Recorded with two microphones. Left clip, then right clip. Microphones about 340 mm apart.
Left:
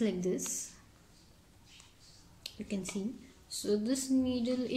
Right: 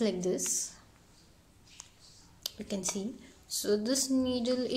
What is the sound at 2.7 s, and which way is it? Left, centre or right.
A woman's voice, centre.